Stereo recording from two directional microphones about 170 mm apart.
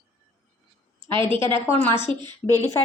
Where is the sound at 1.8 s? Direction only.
15° left (ahead or behind).